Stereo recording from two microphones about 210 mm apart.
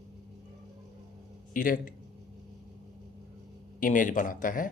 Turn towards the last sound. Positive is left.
turn(degrees=40)  # may be behind; listen again after turning